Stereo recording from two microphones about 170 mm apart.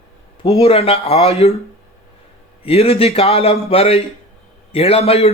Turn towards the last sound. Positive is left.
turn(degrees=40)  # may be behind; listen again after turning